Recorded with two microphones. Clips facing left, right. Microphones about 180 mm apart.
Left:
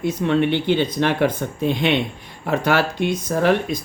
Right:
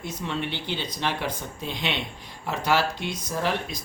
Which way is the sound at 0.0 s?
60° left (ahead or behind).